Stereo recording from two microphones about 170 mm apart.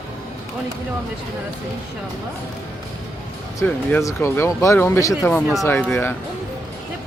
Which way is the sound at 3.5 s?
15° left (ahead or behind).